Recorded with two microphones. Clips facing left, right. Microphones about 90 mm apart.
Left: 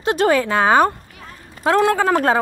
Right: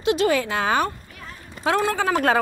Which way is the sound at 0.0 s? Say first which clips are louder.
Left 3 dB; 45° left (ahead or behind).